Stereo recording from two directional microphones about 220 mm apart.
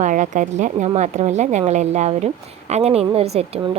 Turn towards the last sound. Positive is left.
turn(degrees=-25)  # may be behind; listen again after turning